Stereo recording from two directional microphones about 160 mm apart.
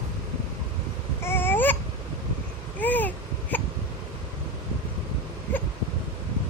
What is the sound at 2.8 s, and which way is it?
Babbling, 10° left (ahead or behind).